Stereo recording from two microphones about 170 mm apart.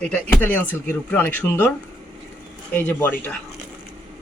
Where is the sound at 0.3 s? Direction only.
10° left (ahead or behind).